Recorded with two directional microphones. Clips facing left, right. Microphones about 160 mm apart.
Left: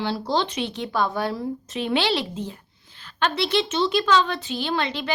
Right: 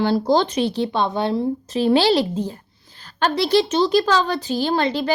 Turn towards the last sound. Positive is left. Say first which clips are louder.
# right 6 dB
turn(degrees=-40)  # may be behind; listen again after turning